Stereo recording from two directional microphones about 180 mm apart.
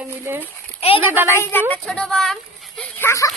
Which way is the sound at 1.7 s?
5° left (ahead or behind).